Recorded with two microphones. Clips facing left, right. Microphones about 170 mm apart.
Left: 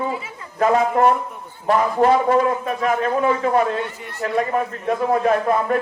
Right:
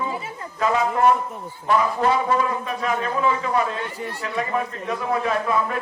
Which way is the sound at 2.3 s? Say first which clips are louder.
Left 5 dB; 50° left (ahead or behind).